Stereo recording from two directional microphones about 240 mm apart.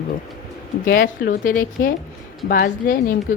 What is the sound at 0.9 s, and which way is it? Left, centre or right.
A woman's voice, left.